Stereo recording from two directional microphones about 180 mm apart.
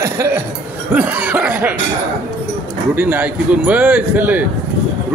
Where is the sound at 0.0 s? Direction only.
15° right (ahead or behind).